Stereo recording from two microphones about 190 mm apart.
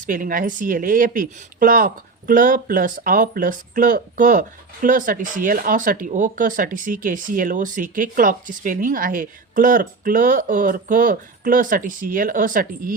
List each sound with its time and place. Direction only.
0.0 s speech: 45° right (ahead or behind)